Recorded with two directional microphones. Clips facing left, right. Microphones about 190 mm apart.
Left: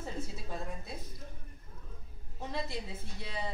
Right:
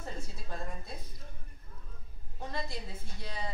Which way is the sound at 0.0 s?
5° left (ahead or behind).